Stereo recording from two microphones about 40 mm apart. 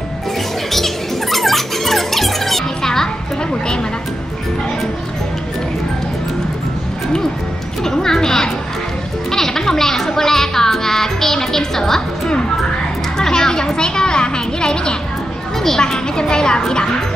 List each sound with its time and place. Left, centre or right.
0.7 s music: centre
7.8 s speech: centre
13.2 s a woman's voice: centre